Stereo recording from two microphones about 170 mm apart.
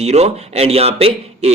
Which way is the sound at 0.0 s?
40° right (ahead or behind).